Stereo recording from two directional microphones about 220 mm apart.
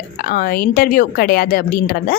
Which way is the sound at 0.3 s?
40° left (ahead or behind).